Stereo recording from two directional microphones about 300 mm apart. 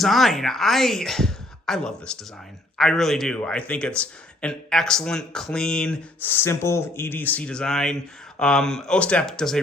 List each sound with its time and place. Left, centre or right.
0.0 s speech: centre